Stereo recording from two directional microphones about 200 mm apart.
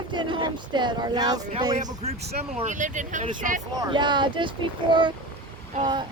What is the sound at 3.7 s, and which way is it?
Speech, 20° right (ahead or behind).